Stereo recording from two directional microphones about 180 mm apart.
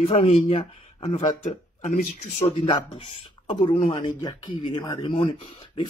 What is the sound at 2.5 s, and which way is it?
Speech, 30° left (ahead or behind).